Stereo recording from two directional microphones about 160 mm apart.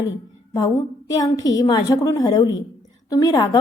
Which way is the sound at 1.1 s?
20° left (ahead or behind).